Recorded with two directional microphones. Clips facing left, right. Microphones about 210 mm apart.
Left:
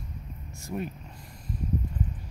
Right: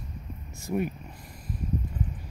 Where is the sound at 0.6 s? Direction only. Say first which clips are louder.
Right 5 dB; 10° right (ahead or behind).